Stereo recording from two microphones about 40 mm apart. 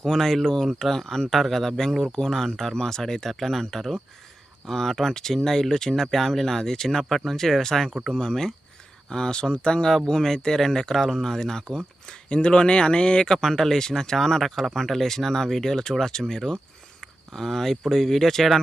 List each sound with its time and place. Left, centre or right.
0.0 s speech: centre
9.9 s speech: centre
12.0 s speech: left
13.4 s speech: centre